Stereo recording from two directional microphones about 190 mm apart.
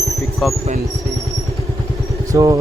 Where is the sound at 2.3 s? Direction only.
20° right (ahead or behind).